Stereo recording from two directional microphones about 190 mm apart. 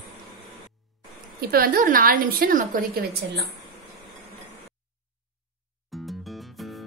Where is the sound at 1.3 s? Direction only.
50° right (ahead or behind).